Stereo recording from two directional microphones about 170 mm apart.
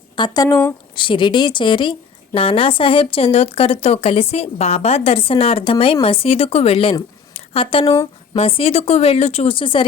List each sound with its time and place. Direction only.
0.2 s a woman's voice: 25° left (ahead or behind)